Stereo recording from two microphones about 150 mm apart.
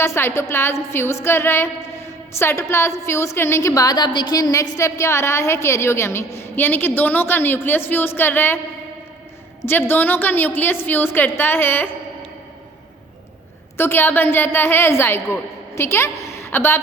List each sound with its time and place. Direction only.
0.0 s a woman's voice: 15° left (ahead or behind)
9.6 s a woman's voice: 15° left (ahead or behind)
13.7 s a woman's voice: 15° left (ahead or behind)